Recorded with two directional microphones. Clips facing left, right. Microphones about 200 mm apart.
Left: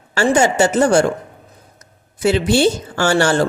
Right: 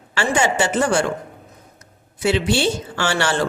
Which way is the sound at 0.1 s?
40° left (ahead or behind).